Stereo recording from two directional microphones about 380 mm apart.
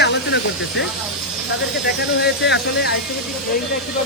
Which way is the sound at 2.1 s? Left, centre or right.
Left.